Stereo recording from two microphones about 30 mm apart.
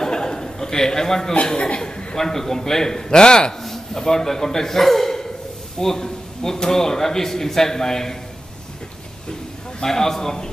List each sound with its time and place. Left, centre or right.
0.0 s a sound: left
2.1 s a man's voice: centre
3.6 s a man's voice: centre
9.8 s a man's voice: centre